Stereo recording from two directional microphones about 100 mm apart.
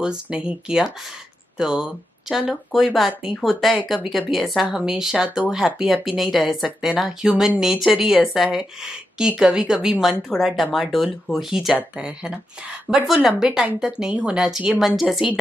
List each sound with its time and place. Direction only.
0.0 s speech: 10° right (ahead or behind)